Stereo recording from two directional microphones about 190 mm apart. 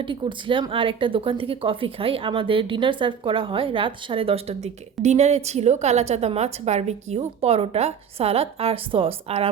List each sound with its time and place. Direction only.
0.0 s speech: 25° right (ahead or behind)